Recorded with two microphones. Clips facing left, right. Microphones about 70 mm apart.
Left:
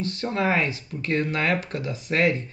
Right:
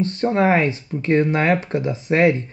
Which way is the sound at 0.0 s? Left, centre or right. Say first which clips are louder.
Right 7 dB; right.